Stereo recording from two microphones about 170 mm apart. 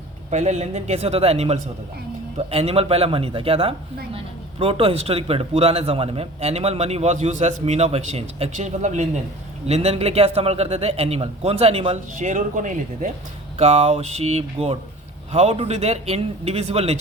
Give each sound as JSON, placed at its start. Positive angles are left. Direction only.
{"t": 0.3, "sound": "a man's voice", "side_deg": -40}